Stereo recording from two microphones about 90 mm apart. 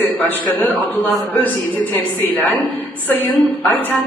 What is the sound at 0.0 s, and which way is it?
A man's voice, 20° left (ahead or behind).